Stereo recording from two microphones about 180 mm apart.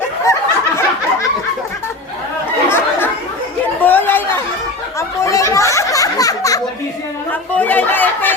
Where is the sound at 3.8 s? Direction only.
10° left (ahead or behind).